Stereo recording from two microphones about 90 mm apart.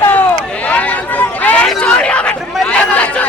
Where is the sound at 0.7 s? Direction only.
20° left (ahead or behind).